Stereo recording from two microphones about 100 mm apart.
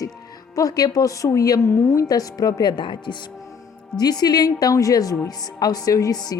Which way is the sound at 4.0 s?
40° left (ahead or behind).